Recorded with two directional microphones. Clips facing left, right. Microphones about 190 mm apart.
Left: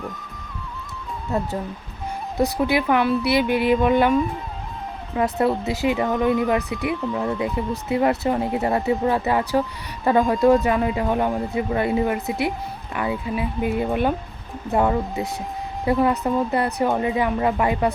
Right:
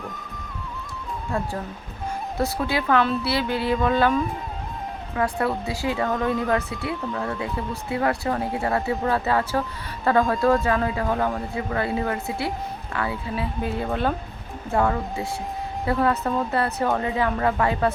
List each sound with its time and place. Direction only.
1.3 s speech: 20° left (ahead or behind)
5.1 s speech: 20° left (ahead or behind)